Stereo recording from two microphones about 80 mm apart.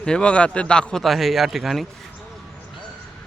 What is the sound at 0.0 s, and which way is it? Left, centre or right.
A man's voice, centre.